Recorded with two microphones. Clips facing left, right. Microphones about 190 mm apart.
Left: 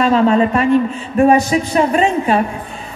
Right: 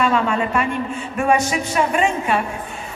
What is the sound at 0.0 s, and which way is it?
A woman's voice, 35° left (ahead or behind).